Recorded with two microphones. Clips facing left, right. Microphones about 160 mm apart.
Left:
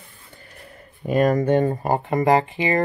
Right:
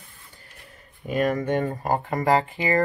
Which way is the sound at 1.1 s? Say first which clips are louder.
Left 5 dB; 40° left (ahead or behind).